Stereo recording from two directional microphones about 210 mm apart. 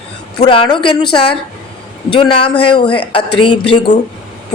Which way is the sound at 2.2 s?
25° left (ahead or behind).